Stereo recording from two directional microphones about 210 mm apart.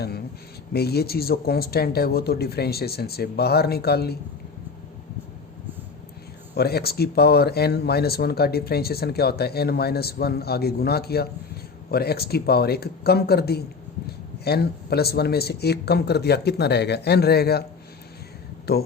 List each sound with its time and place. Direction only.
0.7 s speech: 50° left (ahead or behind)
6.5 s speech: 50° left (ahead or behind)
18.7 s speech: 50° left (ahead or behind)